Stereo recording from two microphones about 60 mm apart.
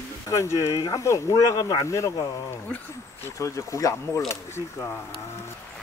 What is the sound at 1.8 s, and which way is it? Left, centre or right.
Speech, left.